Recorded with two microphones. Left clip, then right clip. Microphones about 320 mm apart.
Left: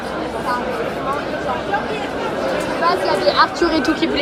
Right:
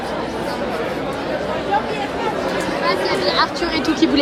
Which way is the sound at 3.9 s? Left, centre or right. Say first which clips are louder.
Right 2 dB; centre.